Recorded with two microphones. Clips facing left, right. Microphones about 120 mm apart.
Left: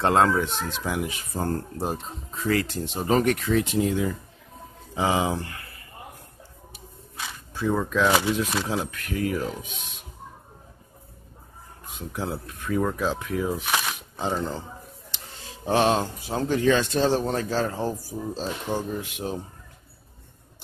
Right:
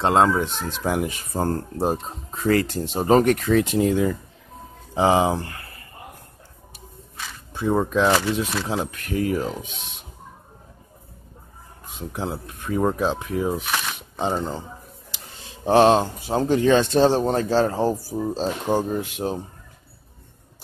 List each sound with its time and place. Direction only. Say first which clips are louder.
0.0 s speech: right 2 dB; 20° right (ahead or behind)
0.7 s speech: right 4 dB; 45° right (ahead or behind)
2.3 s speech: right 5 dB; 45° right (ahead or behind)
4.9 s speech: right 5 dB; 35° right (ahead or behind)
7.5 s speech: right 3 dB; 25° right (ahead or behind)
8.1 s speech: right 2 dB; 15° left (ahead or behind)
8.6 s speech: right 2 dB; 25° right (ahead or behind)
12.1 s speech: right 1 dB; 25° right (ahead or behind)
15.6 s speech: right 6 dB; 35° right (ahead or behind)